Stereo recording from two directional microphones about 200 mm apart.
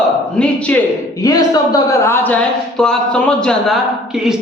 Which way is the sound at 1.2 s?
20° left (ahead or behind).